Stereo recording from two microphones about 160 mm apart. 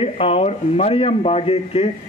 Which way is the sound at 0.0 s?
40° left (ahead or behind).